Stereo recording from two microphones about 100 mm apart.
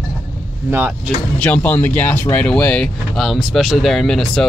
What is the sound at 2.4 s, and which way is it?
Speech, 10° left (ahead or behind).